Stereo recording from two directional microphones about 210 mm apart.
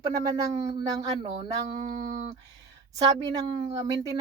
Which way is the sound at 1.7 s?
40° right (ahead or behind).